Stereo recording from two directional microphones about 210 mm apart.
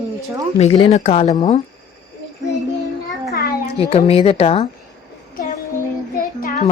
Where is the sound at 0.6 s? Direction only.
25° left (ahead or behind).